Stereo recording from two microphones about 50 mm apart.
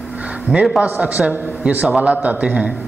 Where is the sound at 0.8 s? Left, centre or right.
Right.